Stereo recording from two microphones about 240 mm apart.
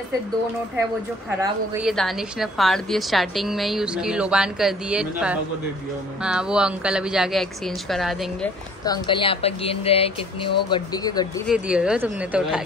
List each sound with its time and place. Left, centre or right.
1.4 s speech: centre
1.9 s a woman's voice: centre
8.8 s speech: centre
11.4 s a woman's voice: centre